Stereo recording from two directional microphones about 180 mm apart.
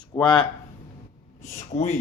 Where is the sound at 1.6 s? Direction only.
40° left (ahead or behind).